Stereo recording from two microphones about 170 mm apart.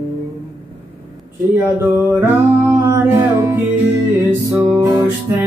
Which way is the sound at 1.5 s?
15° right (ahead or behind).